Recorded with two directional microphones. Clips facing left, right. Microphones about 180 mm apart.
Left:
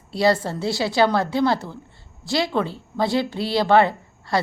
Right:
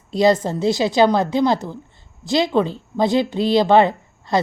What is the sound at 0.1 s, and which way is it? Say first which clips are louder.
A woman's voice: right 4 dB; 20° right (ahead or behind).